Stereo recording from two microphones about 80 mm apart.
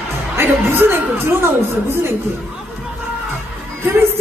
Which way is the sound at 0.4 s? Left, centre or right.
Right.